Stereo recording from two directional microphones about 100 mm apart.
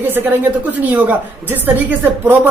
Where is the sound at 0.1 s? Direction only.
20° right (ahead or behind).